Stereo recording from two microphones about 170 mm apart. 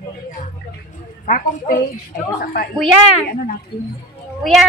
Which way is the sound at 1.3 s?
55° left (ahead or behind).